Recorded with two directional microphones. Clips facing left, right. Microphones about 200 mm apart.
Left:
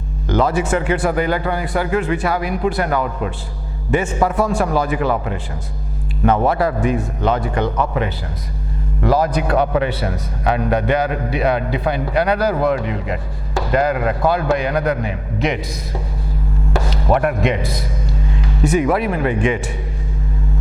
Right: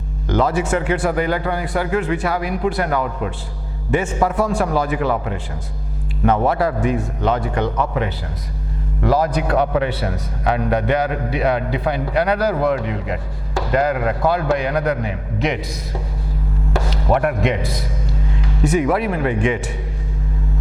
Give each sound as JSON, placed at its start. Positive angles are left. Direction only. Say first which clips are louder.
{"t": 0.3, "sound": "a man's voice", "louder": "left 1 dB", "side_deg": 10}